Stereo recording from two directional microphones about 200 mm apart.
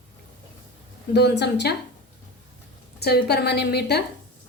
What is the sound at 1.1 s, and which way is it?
Speech, 55° left (ahead or behind).